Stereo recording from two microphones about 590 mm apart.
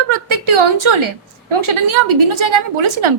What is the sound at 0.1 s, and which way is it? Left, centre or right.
A woman's voice, right.